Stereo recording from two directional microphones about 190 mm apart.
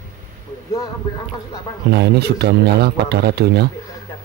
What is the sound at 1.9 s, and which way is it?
Speech, 60° right (ahead or behind).